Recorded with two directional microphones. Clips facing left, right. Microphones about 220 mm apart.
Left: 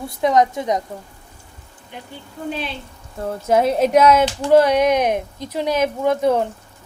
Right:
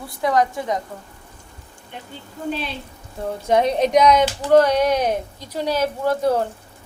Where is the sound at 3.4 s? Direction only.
5° left (ahead or behind).